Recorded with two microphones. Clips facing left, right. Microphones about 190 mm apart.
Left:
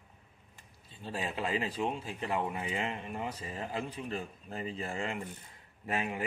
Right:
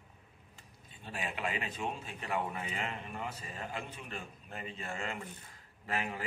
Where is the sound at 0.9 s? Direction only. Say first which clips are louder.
Left 4 dB; 35° left (ahead or behind).